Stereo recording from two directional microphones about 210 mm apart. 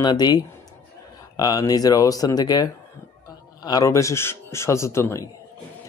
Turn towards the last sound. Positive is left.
turn(degrees=15)  # may be behind; listen again after turning